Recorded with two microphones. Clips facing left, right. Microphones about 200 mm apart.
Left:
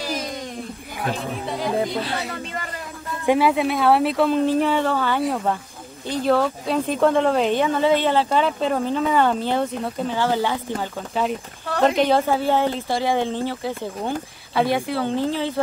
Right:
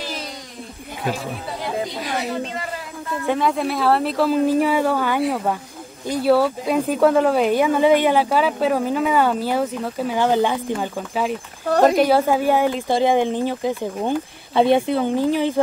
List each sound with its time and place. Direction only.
3.3 s speech: 5° left (ahead or behind); by 10.9 s 15° right (ahead or behind)
11.9 s speech: 10° right (ahead or behind)